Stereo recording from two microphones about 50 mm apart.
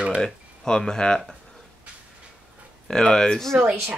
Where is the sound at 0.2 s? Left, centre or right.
Centre.